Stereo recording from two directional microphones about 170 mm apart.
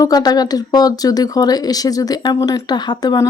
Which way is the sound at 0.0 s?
20° left (ahead or behind).